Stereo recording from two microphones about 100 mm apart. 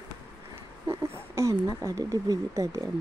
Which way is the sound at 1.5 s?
35° right (ahead or behind).